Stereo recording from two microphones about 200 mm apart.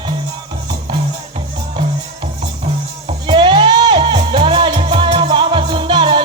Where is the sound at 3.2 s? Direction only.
25° right (ahead or behind).